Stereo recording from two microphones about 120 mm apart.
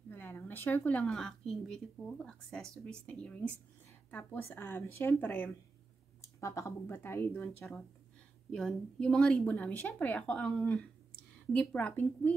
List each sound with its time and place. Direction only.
0.1 s a woman's voice: 20° left (ahead or behind)
6.4 s a woman's voice: 25° left (ahead or behind)